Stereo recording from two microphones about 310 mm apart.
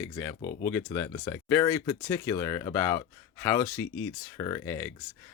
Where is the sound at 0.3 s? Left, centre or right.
Left.